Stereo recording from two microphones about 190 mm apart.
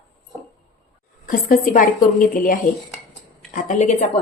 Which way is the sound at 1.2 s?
45° left (ahead or behind).